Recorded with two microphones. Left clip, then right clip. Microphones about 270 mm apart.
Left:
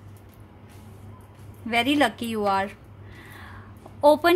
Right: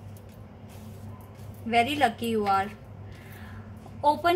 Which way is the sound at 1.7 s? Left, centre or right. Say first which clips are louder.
Left 2 dB; left.